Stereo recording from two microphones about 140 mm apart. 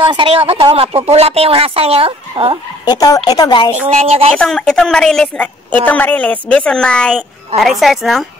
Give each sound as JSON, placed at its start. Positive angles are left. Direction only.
{"t": 0.0, "sound": "speech", "side_deg": -35}
{"t": 2.8, "sound": "speech", "side_deg": 25}
{"t": 3.9, "sound": "speech", "side_deg": -45}
{"t": 4.3, "sound": "a woman's voice", "side_deg": 5}